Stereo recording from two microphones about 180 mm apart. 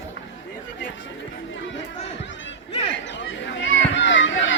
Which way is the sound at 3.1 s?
85° left.